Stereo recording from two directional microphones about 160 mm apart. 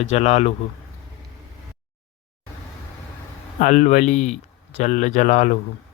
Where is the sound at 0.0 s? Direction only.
40° left (ahead or behind).